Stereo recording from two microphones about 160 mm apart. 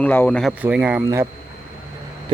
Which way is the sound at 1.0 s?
20° right (ahead or behind).